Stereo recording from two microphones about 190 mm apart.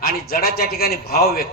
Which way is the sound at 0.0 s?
50° left (ahead or behind).